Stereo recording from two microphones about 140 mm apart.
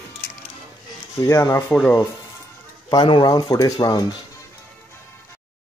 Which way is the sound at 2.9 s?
30° left (ahead or behind).